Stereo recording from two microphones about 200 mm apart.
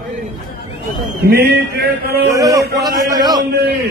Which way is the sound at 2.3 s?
15° right (ahead or behind).